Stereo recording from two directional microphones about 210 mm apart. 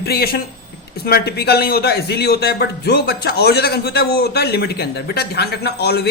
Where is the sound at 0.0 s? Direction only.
50° left (ahead or behind).